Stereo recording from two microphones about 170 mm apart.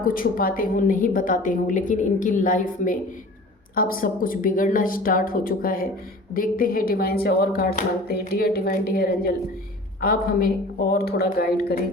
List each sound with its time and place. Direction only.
0.0 s a woman's voice: 55° left (ahead or behind)